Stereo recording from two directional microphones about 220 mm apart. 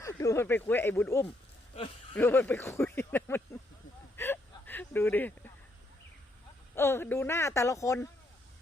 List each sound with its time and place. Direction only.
0.0 s speech: 15° left (ahead or behind)
4.2 s hiccup: 10° left (ahead or behind)
6.7 s speech: 10° left (ahead or behind)